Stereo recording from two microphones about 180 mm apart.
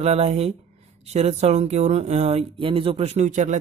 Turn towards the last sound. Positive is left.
turn(degrees=-40)  # may be behind; listen again after turning